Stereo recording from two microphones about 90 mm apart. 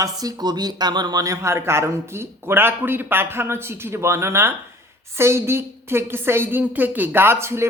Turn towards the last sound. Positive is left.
turn(degrees=-30)  # may be behind; listen again after turning